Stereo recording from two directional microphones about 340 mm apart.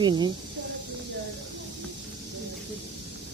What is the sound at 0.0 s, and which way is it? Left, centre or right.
Speech, centre.